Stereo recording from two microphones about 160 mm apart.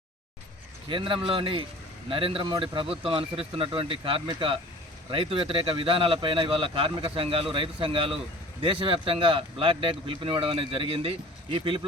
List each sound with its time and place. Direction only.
0.9 s a man's voice: 30° right (ahead or behind)